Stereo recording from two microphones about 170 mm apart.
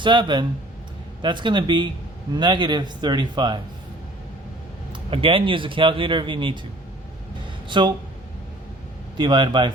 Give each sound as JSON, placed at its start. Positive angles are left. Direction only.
{"t": 0.0, "sound": "speech", "side_deg": -25}
{"t": 4.9, "sound": "speech", "side_deg": -30}
{"t": 7.7, "sound": "speech", "side_deg": -25}
{"t": 9.1, "sound": "speech", "side_deg": -25}